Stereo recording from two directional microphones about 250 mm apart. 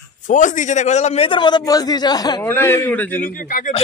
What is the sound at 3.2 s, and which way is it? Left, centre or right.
Speech, left.